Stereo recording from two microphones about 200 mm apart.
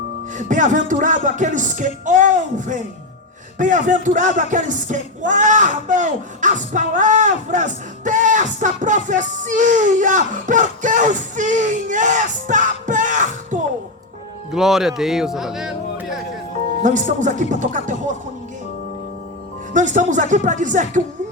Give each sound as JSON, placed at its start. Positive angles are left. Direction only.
{"t": 0.3, "sound": "speech", "side_deg": -40}
{"t": 14.5, "sound": "speech", "side_deg": 0}
{"t": 16.8, "sound": "speech", "side_deg": -40}
{"t": 19.7, "sound": "speech", "side_deg": -40}